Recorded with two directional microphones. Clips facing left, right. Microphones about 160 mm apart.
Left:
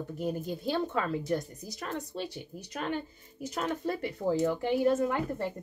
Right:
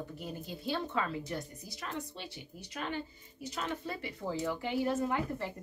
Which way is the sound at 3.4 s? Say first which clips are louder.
Left 6 dB; 45° left (ahead or behind).